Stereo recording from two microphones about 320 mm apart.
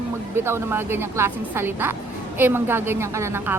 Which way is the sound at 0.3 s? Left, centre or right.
Centre.